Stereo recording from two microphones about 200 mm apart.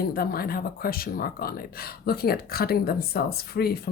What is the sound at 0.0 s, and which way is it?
Speech, 50° left (ahead or behind).